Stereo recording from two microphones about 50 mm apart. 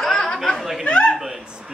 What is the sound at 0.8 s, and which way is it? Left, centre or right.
Chuckle, centre.